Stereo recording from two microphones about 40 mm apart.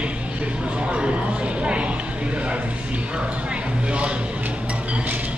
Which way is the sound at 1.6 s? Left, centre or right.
Right.